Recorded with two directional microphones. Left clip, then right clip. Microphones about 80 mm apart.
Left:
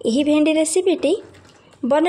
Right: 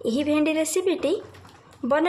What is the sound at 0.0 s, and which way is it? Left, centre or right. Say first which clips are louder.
Speech: left 6 dB; left.